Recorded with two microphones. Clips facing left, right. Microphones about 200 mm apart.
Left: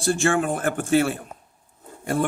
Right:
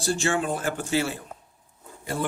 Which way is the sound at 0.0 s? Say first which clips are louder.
Left 4 dB; 55° left (ahead or behind).